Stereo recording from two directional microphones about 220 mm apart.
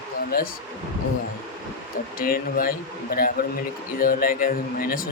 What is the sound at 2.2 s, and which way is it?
Speech, 40° left (ahead or behind).